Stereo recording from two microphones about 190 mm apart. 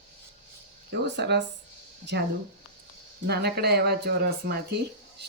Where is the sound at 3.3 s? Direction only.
60° right (ahead or behind).